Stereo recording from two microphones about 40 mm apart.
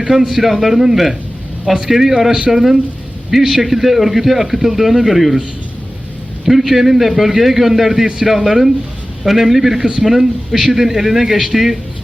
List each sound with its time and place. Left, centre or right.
0.1 s a man's voice: centre
6.4 s a man's voice: centre
9.8 s a man's voice: centre